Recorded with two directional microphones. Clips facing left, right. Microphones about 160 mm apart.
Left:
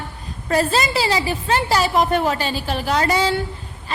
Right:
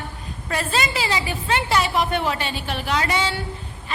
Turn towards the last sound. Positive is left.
turn(degrees=40)  # may be behind; listen again after turning